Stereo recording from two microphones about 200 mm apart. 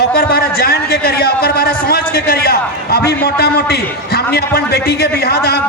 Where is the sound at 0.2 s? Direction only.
50° left (ahead or behind).